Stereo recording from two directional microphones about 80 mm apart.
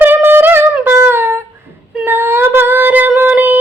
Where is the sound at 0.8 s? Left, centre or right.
Right.